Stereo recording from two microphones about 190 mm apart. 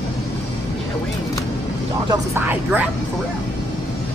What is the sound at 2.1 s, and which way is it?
Speech, 10° right (ahead or behind).